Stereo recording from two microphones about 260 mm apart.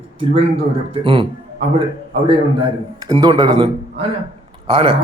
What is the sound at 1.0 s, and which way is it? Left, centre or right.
Speech, centre.